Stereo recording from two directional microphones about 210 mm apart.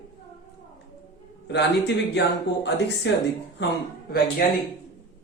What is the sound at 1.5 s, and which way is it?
Speech, 55° left (ahead or behind).